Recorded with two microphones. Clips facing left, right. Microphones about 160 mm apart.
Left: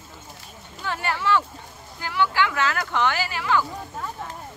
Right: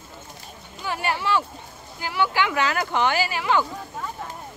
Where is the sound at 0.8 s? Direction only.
15° right (ahead or behind).